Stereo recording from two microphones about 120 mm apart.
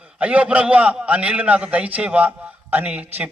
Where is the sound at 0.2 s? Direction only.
10° right (ahead or behind).